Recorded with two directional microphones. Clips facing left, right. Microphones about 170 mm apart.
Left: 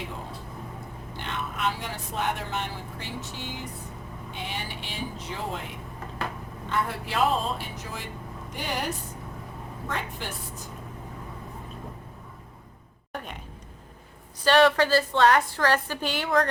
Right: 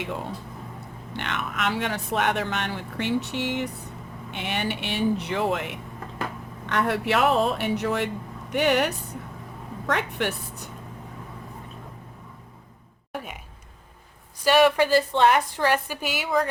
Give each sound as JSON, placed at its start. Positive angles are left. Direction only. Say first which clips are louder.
{"t": 1.1, "sound": "speech", "louder": "right 4 dB", "side_deg": -75}
{"t": 14.4, "sound": "a woman's voice", "louder": "right 1 dB", "side_deg": -15}